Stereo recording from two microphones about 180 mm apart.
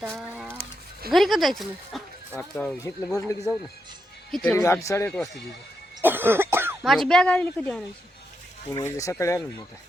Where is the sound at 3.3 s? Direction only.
20° left (ahead or behind).